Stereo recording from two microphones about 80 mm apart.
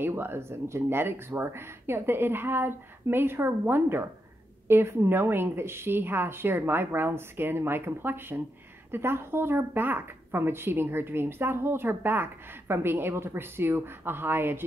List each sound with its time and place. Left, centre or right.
0.0 s a woman's voice: right